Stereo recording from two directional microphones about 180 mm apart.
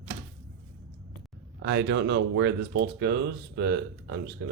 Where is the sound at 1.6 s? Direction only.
70° right (ahead or behind).